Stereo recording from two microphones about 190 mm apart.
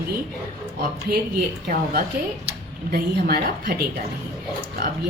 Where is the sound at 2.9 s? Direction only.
55° right (ahead or behind).